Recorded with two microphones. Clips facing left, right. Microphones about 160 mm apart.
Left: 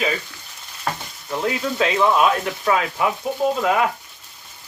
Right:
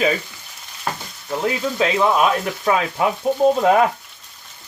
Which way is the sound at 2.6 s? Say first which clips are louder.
Right 1 dB; 25° right (ahead or behind).